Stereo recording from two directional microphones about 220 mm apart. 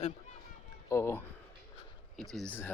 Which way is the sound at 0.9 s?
10° left (ahead or behind).